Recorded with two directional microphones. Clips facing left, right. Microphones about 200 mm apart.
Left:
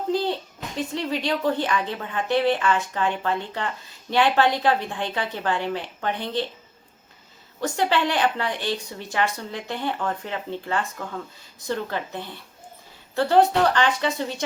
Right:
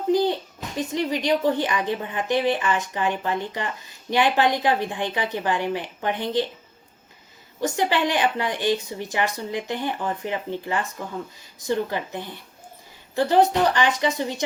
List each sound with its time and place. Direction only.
0.1 s a sound: 15° right (ahead or behind)
0.9 s speech: 15° right (ahead or behind)
7.6 s speech: 15° right (ahead or behind)